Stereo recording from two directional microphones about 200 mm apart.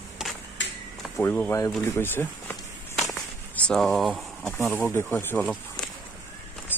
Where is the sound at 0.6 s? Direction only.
65° left (ahead or behind).